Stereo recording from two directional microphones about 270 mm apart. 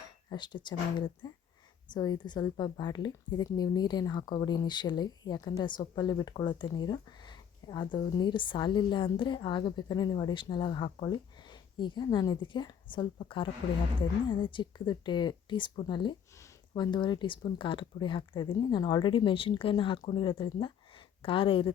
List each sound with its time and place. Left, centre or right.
0.3 s a woman's voice: centre